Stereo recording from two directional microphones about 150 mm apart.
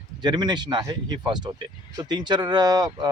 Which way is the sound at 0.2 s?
30° right (ahead or behind).